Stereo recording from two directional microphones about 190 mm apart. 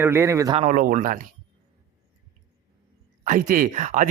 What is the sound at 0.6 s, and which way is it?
Speech, 45° right (ahead or behind).